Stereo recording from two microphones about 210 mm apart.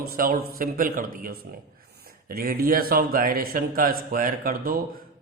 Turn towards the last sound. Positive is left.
turn(degrees=-40)  # may be behind; listen again after turning